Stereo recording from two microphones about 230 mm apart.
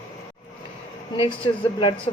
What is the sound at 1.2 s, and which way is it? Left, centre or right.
Speech, left.